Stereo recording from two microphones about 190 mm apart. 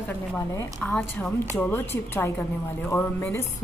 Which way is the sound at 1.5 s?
10° left (ahead or behind).